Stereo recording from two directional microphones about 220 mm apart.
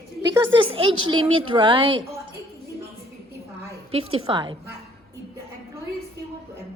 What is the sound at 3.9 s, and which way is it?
Speech, 25° right (ahead or behind).